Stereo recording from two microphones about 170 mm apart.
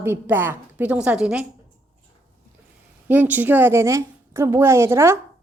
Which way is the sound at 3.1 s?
10° right (ahead or behind).